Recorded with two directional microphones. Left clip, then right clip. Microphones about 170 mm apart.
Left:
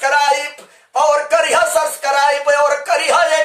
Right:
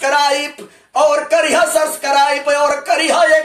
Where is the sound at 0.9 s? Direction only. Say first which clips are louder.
Right 1 dB; 20° left (ahead or behind).